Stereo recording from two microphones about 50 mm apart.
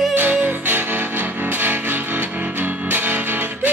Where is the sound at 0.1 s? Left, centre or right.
Right.